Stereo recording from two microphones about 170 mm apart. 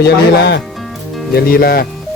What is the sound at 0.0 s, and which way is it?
Speech, 80° left.